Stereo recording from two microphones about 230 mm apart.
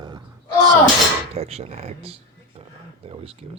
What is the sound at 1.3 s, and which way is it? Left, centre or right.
Speech, right.